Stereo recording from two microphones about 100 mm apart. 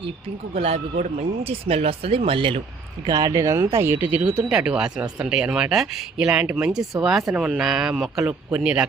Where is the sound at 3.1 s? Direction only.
35° right (ahead or behind); by 8.3 s centre (ahead or behind).